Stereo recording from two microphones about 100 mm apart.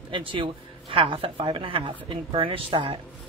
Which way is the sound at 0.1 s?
60° right (ahead or behind).